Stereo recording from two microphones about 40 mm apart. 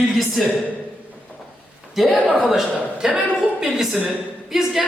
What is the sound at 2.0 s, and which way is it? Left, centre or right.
Speech, centre.